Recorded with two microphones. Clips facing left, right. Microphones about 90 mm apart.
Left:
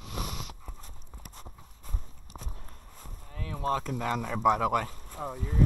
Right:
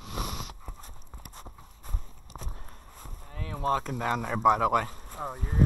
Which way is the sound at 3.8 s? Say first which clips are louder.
Right 1 dB; 50° right (ahead or behind).